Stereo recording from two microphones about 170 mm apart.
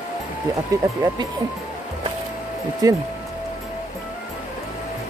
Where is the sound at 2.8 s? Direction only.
20° right (ahead or behind).